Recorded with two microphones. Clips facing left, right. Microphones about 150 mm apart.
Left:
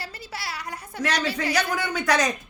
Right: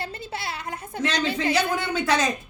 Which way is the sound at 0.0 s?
25° right (ahead or behind).